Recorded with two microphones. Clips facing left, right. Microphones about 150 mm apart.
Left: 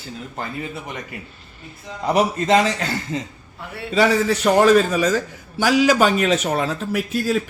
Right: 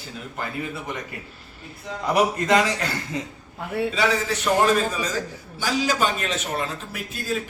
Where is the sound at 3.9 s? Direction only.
55° left (ahead or behind).